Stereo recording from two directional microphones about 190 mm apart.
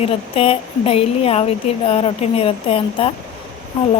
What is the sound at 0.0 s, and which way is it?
Speech, 30° left (ahead or behind).